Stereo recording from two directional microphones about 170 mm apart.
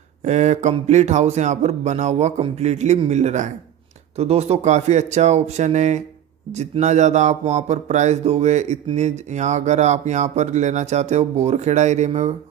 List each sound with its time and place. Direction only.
0.2 s speech: 40° right (ahead or behind)